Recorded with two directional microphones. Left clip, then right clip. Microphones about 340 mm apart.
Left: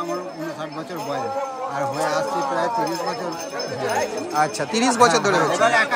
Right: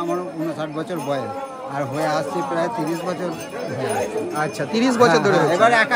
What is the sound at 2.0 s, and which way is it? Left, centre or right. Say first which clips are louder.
Speech: right 1 dB; centre.